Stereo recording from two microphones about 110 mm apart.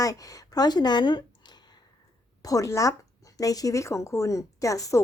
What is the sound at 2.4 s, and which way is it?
Speech, 30° left (ahead or behind).